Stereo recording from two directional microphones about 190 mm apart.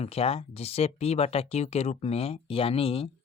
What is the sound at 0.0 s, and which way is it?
Speech, 30° left (ahead or behind).